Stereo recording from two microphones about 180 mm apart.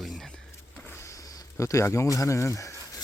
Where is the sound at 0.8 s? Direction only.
15° left (ahead or behind).